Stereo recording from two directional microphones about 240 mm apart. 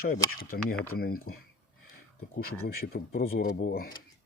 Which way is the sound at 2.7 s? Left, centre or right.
Left.